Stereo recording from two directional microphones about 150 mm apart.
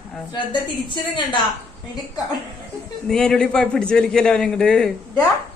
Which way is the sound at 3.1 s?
5° left (ahead or behind).